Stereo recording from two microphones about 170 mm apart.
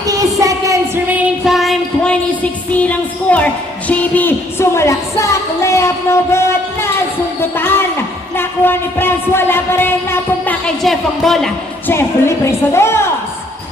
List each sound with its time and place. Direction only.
0.1 s a sound: 20° right (ahead or behind); by 6.5 s 15° left (ahead or behind)
7.5 s speech: 15° left (ahead or behind)
8.4 s music: 15° left (ahead or behind)
12.5 s music: 15° left (ahead or behind)